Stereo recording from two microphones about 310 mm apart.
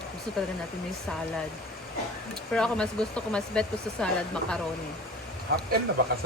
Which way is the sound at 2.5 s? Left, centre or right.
Centre.